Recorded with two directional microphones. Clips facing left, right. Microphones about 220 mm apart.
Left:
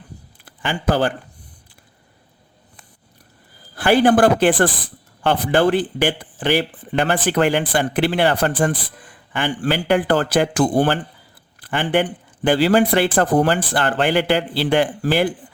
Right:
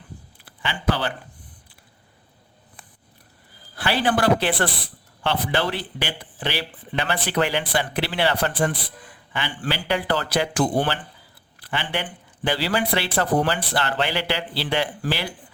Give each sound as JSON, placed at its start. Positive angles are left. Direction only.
{"t": 0.4, "sound": "a man's voice", "side_deg": 45}
{"t": 3.8, "sound": "speech", "side_deg": 50}